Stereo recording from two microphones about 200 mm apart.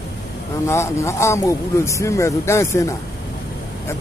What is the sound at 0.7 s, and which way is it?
Speech, 15° left (ahead or behind).